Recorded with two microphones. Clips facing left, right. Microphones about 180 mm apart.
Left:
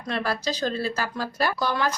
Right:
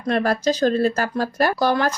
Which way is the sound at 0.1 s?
50° right (ahead or behind).